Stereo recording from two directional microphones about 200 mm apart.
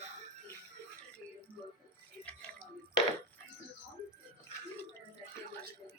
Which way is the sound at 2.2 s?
5° left (ahead or behind).